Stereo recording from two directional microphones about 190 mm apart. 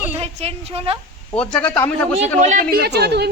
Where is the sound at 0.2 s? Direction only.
30° right (ahead or behind).